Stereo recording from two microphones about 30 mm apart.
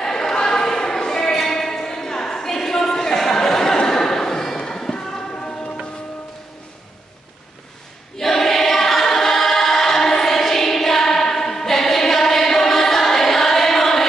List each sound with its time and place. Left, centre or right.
0.0 s basketball bounce: centre
0.5 s a sound: centre
4.6 s music: centre
8.2 s choir: centre